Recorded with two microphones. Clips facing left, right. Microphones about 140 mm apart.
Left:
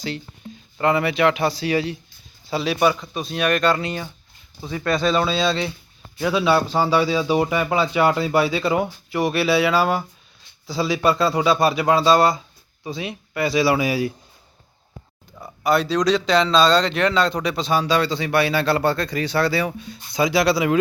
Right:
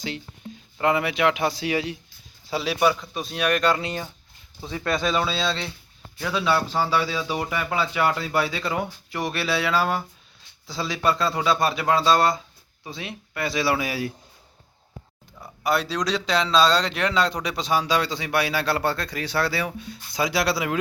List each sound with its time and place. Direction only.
0.8 s a man's voice: 10° right (ahead or behind)
5.0 s a man's voice: 5° right (ahead or behind)
6.1 s a man's voice: 15° left (ahead or behind)
15.6 s a man's voice: 5° right (ahead or behind)